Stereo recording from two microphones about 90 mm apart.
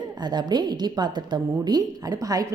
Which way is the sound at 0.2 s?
50° right (ahead or behind).